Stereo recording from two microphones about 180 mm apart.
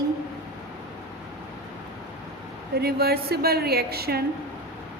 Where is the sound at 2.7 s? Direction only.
60° right (ahead or behind).